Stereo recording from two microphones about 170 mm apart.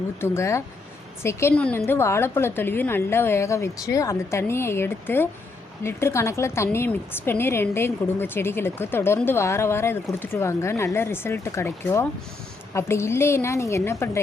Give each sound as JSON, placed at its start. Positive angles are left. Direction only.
{"t": 0.2, "sound": "a woman's voice", "side_deg": 15}